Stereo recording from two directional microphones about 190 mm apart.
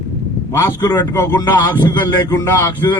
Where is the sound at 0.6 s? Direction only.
15° left (ahead or behind).